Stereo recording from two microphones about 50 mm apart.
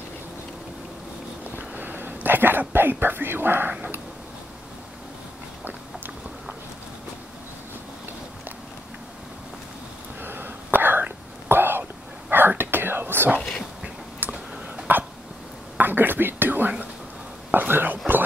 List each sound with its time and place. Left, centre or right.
1.8 s a sound: right
2.7 s speech: right
10.2 s whispering: right
13.4 s dog: centre
14.2 s a sound: right
14.9 s hiccup: right
15.8 s whispering: right
17.5 s dog: right